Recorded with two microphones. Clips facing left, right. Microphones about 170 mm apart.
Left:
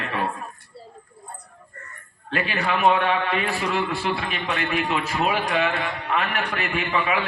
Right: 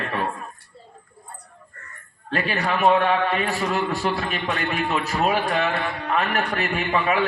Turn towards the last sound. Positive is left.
turn(degrees=-40)  # may be behind; listen again after turning